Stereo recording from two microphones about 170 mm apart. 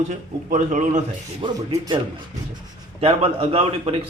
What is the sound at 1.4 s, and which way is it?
A man's voice, 25° right (ahead or behind).